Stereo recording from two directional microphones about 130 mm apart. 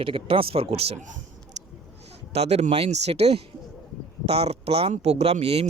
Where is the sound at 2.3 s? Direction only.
55° right (ahead or behind).